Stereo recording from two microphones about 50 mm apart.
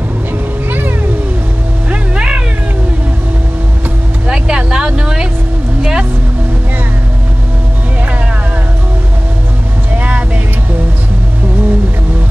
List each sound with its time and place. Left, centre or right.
0.7 s cat: right
1.9 s a sound: right
4.3 s vehicle: centre
9.9 s vehicle: right